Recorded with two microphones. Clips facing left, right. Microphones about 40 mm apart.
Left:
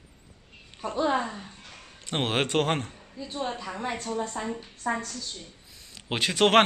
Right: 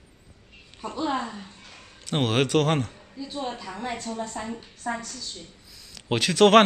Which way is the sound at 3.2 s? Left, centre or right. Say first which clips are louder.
Even; centre.